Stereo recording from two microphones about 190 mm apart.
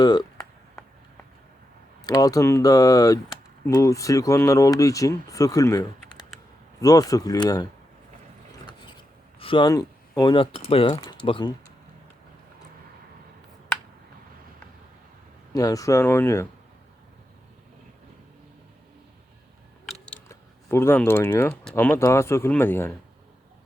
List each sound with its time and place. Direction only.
0.0 s a sound: 20° left (ahead or behind)
2.0 s speech: 20° left (ahead or behind)
9.4 s speech: 25° left (ahead or behind)
15.5 s speech: 20° left (ahead or behind)
20.2 s speech: 15° left (ahead or behind)